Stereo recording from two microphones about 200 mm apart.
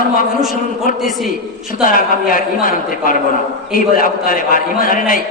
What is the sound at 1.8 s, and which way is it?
A man's voice, 45° left (ahead or behind).